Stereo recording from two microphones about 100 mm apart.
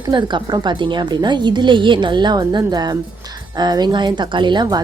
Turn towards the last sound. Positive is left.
turn(degrees=-45)  # may be behind; listen again after turning